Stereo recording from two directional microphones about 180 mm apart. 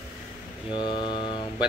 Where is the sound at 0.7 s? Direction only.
25° left (ahead or behind).